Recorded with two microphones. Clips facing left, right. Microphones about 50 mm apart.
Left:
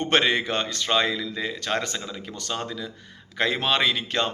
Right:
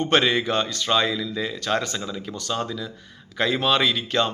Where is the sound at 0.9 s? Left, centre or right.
Left.